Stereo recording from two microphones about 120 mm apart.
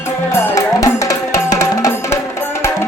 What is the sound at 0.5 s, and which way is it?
Music, 30° left (ahead or behind).